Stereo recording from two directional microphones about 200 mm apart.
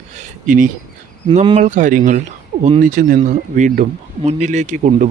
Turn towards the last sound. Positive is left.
turn(degrees=-35)  # may be behind; listen again after turning